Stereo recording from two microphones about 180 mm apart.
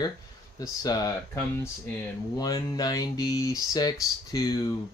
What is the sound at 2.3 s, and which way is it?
Speech, 20° left (ahead or behind).